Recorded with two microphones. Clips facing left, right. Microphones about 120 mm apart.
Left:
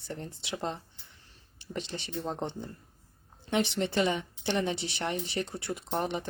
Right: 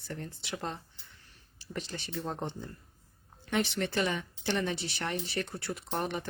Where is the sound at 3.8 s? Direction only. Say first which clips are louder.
Left 3 dB; 25° left (ahead or behind).